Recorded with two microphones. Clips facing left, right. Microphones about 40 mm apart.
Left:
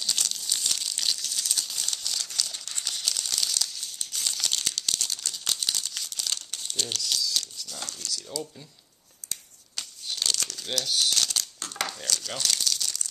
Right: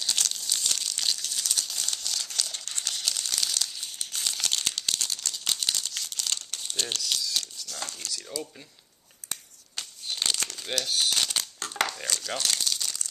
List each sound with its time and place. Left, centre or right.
0.2 s crumpling: centre
7.9 s speech: centre
9.2 s finger snapping: right
9.8 s crumpling: centre
12.2 s speech: centre
12.7 s crumpling: centre